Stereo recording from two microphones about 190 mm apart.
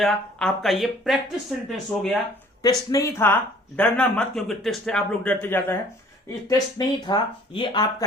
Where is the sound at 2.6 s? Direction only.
20° left (ahead or behind).